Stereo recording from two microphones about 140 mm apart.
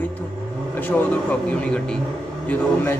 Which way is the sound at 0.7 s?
15° left (ahead or behind).